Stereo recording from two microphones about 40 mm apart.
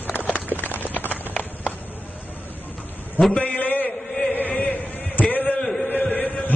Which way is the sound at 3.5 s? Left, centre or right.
Left.